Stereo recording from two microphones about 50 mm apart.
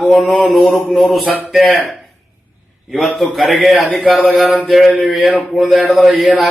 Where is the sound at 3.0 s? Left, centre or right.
Centre.